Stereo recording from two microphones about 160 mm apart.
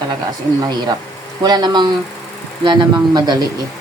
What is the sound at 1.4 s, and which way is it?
Speech, 25° right (ahead or behind).